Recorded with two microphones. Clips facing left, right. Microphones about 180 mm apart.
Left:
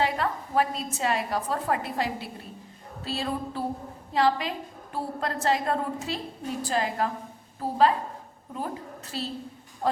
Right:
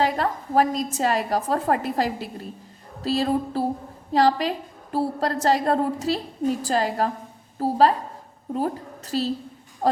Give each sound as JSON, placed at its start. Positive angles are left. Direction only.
{"t": 0.0, "sound": "a woman's voice", "side_deg": -40}